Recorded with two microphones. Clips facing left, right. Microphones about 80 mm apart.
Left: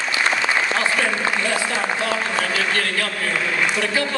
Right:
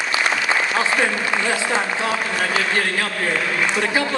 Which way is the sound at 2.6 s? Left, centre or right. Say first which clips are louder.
Right 1 dB; right.